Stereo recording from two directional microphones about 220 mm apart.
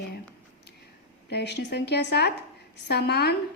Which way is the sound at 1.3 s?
50° left (ahead or behind).